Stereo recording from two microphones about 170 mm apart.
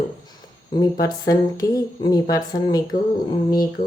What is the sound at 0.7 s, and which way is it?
Speech, 25° left (ahead or behind).